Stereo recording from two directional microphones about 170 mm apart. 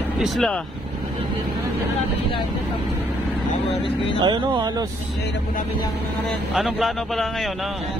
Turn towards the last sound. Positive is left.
turn(degrees=0)  # may be behind; listen again after turning